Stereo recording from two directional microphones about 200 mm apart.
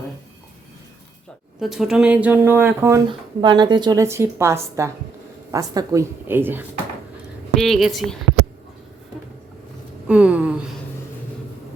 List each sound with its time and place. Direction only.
1.5 s a woman's voice: centre (ahead or behind)
3.1 s a woman's voice: 20° right (ahead or behind)
7.6 s a woman's voice: centre (ahead or behind)
10.1 s a woman's voice: 5° right (ahead or behind)